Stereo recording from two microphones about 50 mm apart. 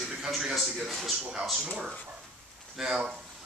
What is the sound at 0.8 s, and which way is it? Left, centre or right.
Speech, centre.